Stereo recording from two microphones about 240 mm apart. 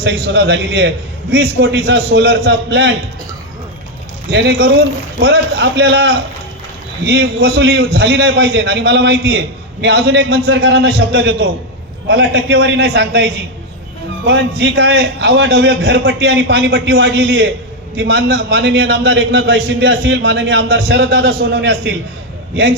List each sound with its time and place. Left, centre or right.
0.0 s a man's voice: right
4.3 s a man's voice: right